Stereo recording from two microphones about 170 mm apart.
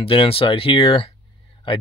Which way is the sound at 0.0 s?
35° left (ahead or behind).